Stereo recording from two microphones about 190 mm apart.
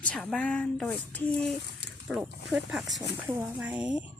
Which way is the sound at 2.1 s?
5° right (ahead or behind).